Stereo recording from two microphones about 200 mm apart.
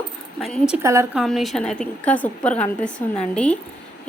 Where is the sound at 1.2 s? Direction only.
Centre (ahead or behind).